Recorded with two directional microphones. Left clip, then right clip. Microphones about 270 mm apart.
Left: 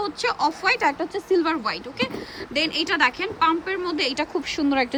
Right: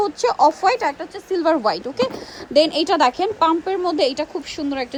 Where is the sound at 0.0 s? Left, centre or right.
Centre.